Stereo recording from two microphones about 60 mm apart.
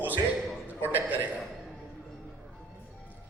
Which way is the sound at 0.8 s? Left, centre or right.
Right.